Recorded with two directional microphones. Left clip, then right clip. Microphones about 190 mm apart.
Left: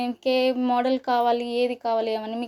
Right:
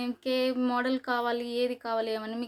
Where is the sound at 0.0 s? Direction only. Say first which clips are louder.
Left 7 dB; 10° left (ahead or behind).